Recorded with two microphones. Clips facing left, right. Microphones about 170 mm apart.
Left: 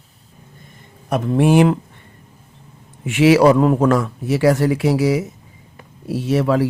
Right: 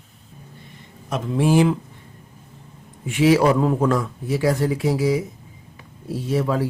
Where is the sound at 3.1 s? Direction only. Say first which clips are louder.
Left 4 dB; 80° left.